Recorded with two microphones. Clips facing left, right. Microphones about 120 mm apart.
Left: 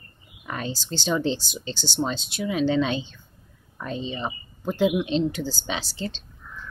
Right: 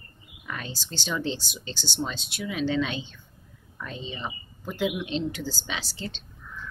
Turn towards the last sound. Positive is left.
turn(degrees=30)  # may be behind; listen again after turning